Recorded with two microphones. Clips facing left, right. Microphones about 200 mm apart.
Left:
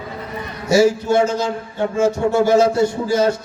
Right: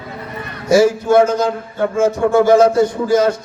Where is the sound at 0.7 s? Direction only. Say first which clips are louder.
Right 3 dB; 50° right (ahead or behind).